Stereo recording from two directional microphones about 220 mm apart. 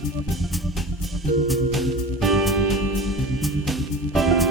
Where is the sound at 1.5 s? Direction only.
Centre (ahead or behind).